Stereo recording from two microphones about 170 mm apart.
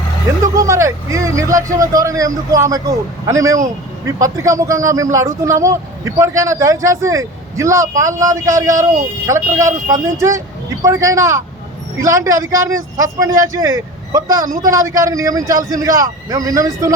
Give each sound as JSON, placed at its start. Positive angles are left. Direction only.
{"t": 0.5, "sound": "speech", "side_deg": -20}